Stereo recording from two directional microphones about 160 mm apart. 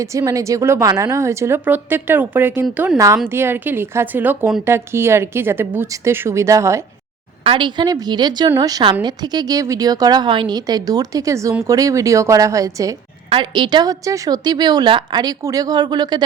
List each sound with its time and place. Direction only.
0.0 s a woman's voice: 20° right (ahead or behind)
7.4 s a woman's voice: 30° right (ahead or behind)